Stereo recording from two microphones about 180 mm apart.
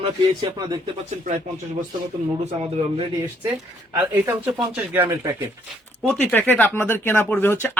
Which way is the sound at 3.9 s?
10° right (ahead or behind).